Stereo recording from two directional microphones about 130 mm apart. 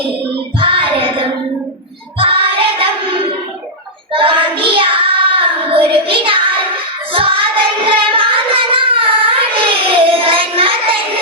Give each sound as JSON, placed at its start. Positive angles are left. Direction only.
{"t": 0.6, "sound": "child singing", "side_deg": -45}